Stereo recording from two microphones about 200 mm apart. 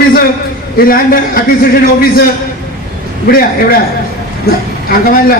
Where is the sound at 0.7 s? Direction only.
45° left (ahead or behind).